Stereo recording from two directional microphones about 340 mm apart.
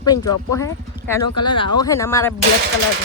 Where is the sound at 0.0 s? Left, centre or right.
Centre.